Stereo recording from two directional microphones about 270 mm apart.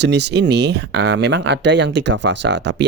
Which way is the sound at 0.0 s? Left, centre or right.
Right.